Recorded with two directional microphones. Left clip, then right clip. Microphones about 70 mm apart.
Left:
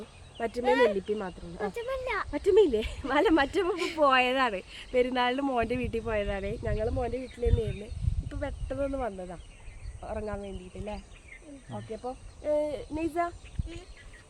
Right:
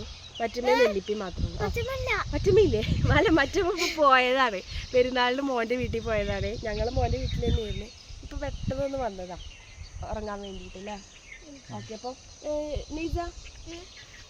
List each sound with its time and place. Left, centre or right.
0.6 s speech: centre
1.9 s speech: right
2.3 s speech: centre
3.8 s speech: right
4.0 s speech: centre
5.5 s speech: centre
6.1 s speech: centre
11.7 s speech: right
12.5 s speech: right